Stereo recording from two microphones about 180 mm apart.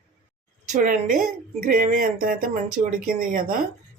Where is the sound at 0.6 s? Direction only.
45° right (ahead or behind).